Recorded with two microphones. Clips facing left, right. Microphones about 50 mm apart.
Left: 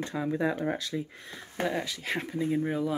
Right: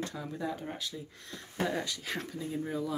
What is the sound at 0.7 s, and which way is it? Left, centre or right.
Speech, left.